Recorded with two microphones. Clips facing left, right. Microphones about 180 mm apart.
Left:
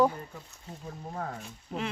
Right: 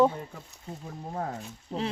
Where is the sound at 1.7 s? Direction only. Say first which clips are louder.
Right 3 dB; 30° right (ahead or behind).